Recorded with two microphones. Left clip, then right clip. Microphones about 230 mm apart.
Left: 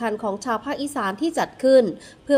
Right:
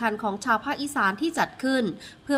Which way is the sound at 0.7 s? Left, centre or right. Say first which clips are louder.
Right 1 dB; centre.